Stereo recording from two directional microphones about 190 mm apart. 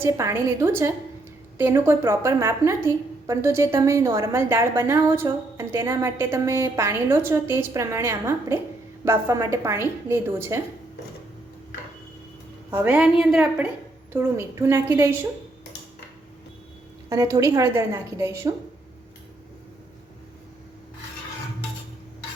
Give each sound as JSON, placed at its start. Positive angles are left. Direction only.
{"t": 0.0, "sound": "a woman's voice", "side_deg": -15}
{"t": 12.7, "sound": "a woman's voice", "side_deg": -10}
{"t": 17.3, "sound": "a woman's voice", "side_deg": -15}